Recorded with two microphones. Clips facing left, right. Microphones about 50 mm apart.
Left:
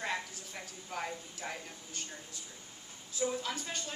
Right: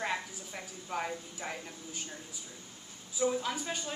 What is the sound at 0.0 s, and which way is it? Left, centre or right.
A woman's voice, centre.